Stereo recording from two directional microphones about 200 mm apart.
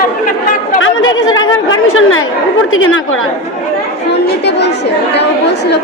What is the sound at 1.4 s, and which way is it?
A woman's voice, 85° left.